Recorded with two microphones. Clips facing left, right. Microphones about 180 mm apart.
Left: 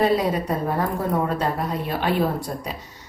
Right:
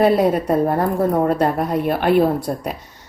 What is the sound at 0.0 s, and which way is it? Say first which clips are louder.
A woman's voice: right 5 dB; 55° right (ahead or behind).